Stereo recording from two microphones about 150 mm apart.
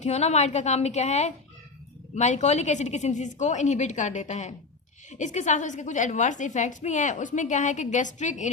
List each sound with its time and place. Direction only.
0.0 s a woman's voice: 45° left (ahead or behind)